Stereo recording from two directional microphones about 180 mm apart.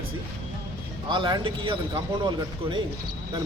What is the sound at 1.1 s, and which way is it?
Speech, 25° right (ahead or behind).